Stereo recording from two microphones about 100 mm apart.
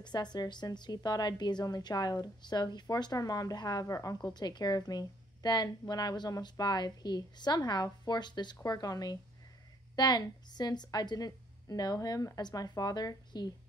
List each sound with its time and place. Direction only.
0.0 s a woman's voice: 45° left (ahead or behind)